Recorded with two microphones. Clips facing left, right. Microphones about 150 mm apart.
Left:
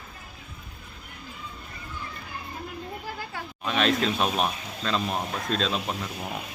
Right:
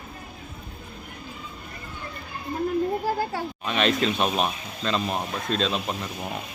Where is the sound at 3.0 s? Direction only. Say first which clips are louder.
Right 10 dB; 35° right (ahead or behind).